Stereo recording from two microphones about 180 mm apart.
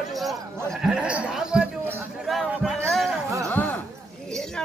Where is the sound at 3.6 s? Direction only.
10° left (ahead or behind).